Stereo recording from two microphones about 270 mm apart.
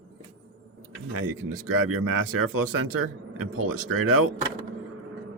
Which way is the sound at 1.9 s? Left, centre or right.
Right.